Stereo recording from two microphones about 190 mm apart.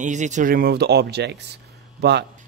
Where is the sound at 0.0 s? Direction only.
40° right (ahead or behind); by 2.2 s 60° right (ahead or behind).